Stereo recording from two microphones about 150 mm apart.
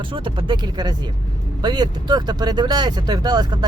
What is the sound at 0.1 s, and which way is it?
Speech, 35° right (ahead or behind).